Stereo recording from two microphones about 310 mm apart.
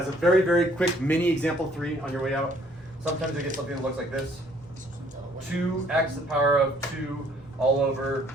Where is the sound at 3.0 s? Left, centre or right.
Right.